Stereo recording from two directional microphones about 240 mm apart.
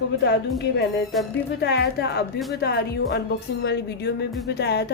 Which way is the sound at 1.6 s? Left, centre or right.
Left.